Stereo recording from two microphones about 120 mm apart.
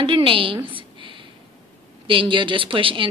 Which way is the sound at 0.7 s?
45° right (ahead or behind).